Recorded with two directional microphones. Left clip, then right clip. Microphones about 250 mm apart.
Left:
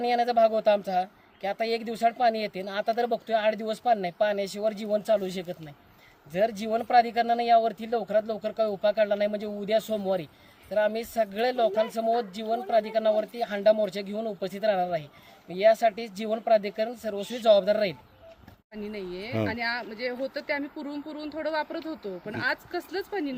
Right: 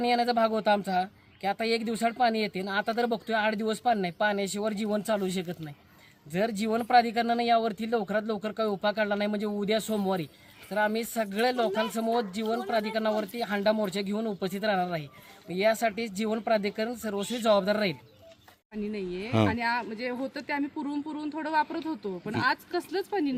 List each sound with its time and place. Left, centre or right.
0.0 s speech: centre